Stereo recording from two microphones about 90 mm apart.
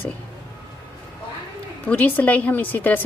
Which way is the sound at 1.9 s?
20° left (ahead or behind).